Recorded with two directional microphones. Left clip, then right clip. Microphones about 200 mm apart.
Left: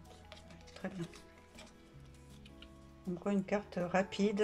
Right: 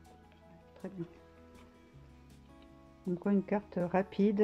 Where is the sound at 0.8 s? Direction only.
15° right (ahead or behind).